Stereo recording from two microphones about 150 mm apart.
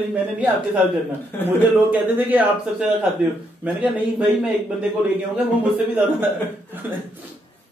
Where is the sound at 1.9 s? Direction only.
10° right (ahead or behind).